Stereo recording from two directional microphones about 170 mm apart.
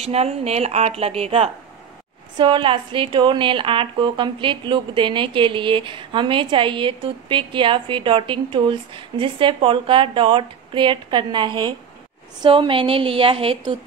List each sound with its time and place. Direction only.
0.0 s a woman's voice: 40° right (ahead or behind)